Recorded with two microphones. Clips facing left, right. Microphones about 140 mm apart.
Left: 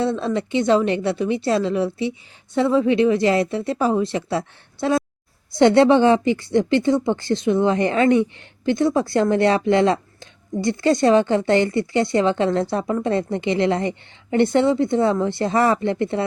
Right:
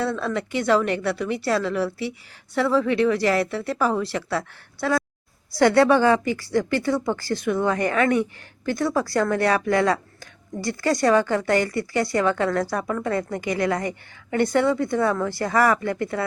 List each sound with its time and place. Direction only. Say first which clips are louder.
0.0 s speech: left 4 dB; 20° left (ahead or behind)